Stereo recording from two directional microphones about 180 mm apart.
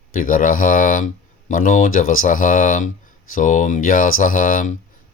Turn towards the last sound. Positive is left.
turn(degrees=50)  # may be behind; listen again after turning